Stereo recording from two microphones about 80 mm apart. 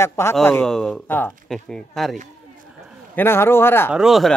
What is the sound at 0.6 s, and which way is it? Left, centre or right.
Speech, centre.